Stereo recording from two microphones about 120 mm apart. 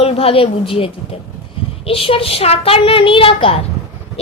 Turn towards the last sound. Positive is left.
turn(degrees=45)  # may be behind; listen again after turning